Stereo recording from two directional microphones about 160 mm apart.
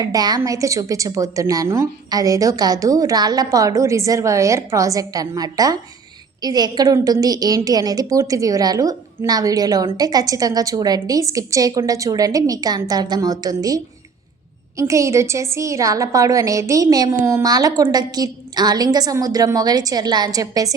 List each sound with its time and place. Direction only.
0.0 s a woman's voice: 25° right (ahead or behind)